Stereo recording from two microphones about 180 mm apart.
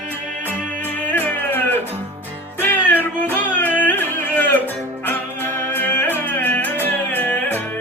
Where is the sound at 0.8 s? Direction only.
10° left (ahead or behind).